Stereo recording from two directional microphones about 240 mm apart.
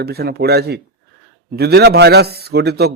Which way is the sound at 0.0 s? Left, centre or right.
Right.